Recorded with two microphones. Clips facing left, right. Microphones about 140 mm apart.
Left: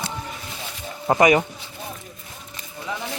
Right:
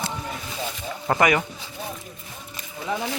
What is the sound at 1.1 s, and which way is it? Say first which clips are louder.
Speech: left 4 dB; 25° left (ahead or behind).